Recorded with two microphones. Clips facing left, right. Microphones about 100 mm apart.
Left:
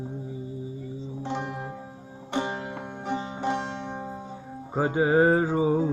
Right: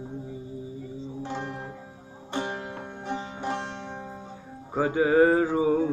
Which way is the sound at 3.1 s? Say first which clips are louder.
Left 3 dB; 35° left (ahead or behind).